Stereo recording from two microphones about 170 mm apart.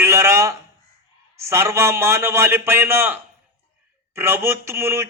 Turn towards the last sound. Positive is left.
turn(degrees=-15)  # may be behind; listen again after turning